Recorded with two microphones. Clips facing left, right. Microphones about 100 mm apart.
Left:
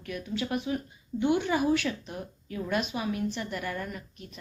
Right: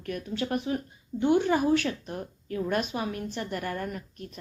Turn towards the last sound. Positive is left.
turn(degrees=-45)  # may be behind; listen again after turning